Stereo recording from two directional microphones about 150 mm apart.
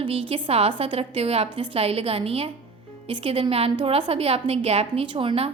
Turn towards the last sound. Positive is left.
turn(degrees=-40)  # may be behind; listen again after turning